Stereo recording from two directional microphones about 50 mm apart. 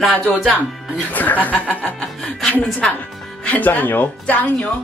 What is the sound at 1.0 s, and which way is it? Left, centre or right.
Speech, left.